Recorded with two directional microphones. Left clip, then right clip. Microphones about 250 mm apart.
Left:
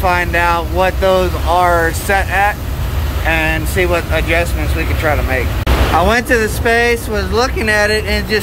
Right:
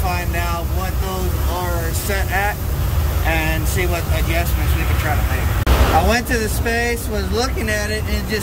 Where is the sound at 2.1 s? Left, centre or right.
Centre.